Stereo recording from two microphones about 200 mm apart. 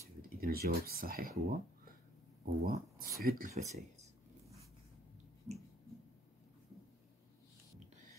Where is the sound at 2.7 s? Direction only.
50° right (ahead or behind); by 3.8 s 35° right (ahead or behind).